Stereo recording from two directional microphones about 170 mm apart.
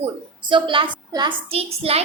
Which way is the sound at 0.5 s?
30° right (ahead or behind).